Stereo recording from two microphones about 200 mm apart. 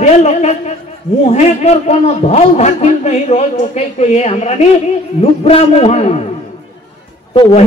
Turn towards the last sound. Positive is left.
turn(degrees=25)  # may be behind; listen again after turning